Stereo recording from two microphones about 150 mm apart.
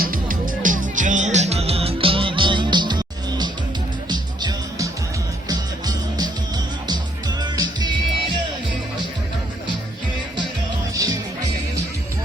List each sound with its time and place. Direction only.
0.0 s music: 70° right (ahead or behind); by 7.9 s 30° right (ahead or behind)
10.9 s music: 20° right (ahead or behind)